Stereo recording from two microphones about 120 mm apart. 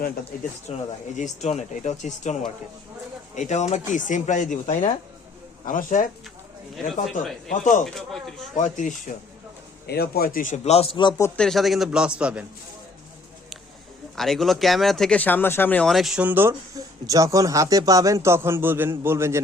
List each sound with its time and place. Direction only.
0.7 s speech: 75° left (ahead or behind)
7.9 s speech: centre (ahead or behind)
8.5 s speech: 90° left
10.4 s a man's voice: 75° left (ahead or behind); by 11.1 s 45° left (ahead or behind)
11.3 s a man's voice: centre (ahead or behind)
14.2 s speech: centre (ahead or behind)
15.2 s speech: 15° left (ahead or behind)
15.9 s speech: centre (ahead or behind)
16.2 s a man's voice: 15° right (ahead or behind)
16.7 s speech: 30° right (ahead or behind)